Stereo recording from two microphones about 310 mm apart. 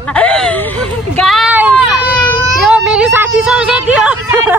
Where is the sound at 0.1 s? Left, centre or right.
Centre.